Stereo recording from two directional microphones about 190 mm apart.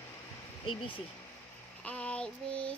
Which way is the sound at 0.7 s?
30° left (ahead or behind).